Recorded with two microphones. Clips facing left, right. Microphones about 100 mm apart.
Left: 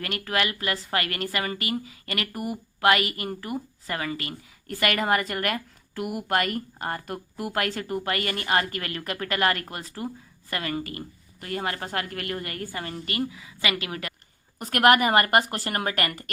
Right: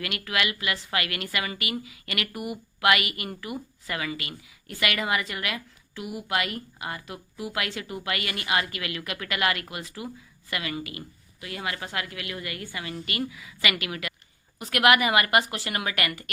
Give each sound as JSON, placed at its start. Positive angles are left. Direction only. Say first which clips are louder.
{"t": 0.0, "sound": "a woman's voice", "louder": "left 2 dB", "side_deg": 40}